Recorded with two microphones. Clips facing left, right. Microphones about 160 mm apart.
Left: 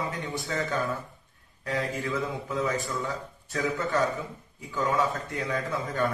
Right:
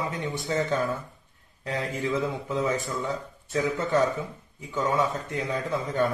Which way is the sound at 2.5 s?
20° right (ahead or behind).